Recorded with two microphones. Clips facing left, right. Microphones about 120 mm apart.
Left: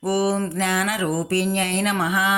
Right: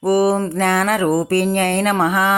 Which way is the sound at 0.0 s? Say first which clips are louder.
Right 6 dB; 50° right (ahead or behind).